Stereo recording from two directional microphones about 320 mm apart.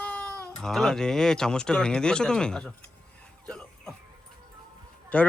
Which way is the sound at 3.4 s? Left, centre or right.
Centre.